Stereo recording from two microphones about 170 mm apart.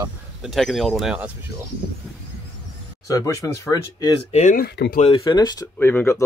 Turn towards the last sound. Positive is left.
turn(degrees=10)  # may be behind; listen again after turning